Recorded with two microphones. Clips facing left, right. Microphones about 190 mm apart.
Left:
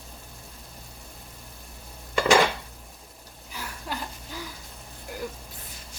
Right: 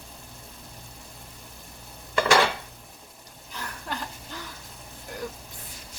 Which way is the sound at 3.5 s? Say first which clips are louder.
Even; 5° left (ahead or behind).